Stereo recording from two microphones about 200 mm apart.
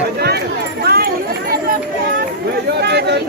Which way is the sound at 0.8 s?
50° right (ahead or behind).